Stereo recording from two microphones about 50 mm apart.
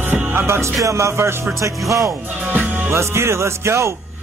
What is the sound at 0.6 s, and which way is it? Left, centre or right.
Speech, right.